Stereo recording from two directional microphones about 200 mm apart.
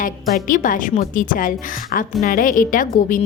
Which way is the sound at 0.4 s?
40° left (ahead or behind).